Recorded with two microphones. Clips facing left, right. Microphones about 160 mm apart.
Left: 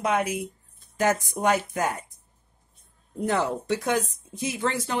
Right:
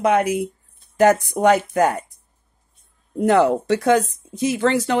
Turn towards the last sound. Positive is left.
turn(degrees=-90)